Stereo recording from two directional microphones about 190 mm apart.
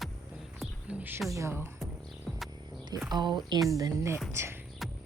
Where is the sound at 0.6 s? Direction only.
5° right (ahead or behind).